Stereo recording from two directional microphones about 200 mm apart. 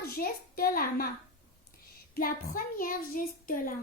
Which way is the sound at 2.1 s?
45° left (ahead or behind).